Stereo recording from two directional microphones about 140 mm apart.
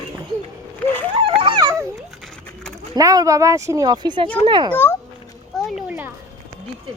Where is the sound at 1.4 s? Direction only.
30° right (ahead or behind).